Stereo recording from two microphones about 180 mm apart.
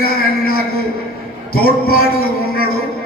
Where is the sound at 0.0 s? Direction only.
55° left (ahead or behind).